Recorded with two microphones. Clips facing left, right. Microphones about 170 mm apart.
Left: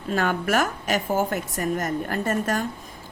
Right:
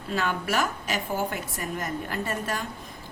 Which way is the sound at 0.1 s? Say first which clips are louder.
Left 4 dB; 50° left (ahead or behind).